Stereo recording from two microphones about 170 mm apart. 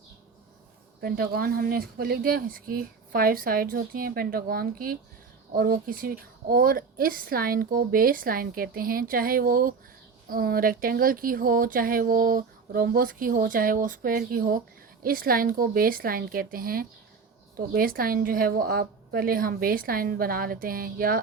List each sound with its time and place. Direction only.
1.0 s speech: 60° right (ahead or behind)